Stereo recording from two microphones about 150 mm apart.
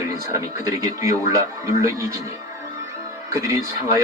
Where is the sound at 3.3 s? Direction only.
20° right (ahead or behind).